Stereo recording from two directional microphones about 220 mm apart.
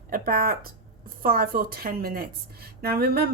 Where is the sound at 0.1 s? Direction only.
40° right (ahead or behind).